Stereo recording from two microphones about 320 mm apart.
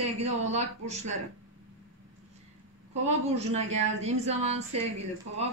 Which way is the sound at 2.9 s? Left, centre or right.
Centre.